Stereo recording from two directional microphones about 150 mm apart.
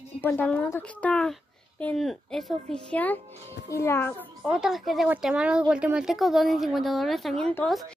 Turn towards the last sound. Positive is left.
turn(degrees=5)  # may be behind; listen again after turning